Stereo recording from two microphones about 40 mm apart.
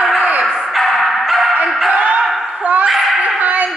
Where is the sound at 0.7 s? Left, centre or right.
Centre.